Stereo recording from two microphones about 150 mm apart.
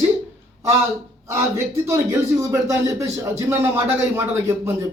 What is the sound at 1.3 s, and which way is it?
Speech, 20° right (ahead or behind).